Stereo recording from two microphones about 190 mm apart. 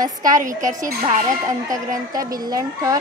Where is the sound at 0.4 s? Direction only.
45° right (ahead or behind).